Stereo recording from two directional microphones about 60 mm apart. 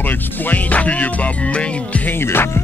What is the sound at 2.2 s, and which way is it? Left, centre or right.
Music, left.